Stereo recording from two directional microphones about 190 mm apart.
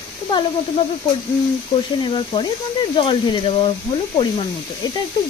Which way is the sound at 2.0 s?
25° left (ahead or behind).